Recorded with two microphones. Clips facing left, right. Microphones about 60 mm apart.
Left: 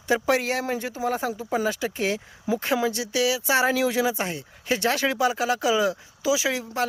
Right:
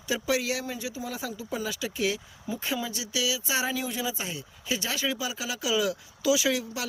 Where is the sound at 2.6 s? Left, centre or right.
Left.